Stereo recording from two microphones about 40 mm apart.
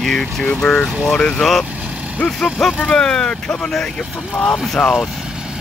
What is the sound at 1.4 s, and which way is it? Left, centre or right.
Speech, centre.